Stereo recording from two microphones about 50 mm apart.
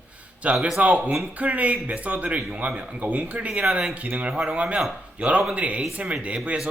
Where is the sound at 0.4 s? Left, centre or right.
Right.